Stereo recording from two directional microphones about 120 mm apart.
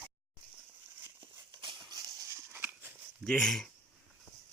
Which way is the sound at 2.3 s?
20° right (ahead or behind).